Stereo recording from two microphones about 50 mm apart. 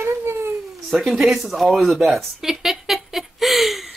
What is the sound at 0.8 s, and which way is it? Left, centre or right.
Speech, centre.